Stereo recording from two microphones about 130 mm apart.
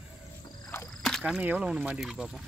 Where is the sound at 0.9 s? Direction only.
5° left (ahead or behind).